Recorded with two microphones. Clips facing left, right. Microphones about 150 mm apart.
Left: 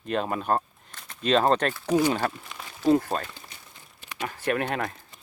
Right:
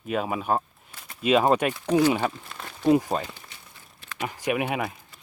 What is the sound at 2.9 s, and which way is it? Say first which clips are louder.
Speech: right 1 dB; 10° right (ahead or behind).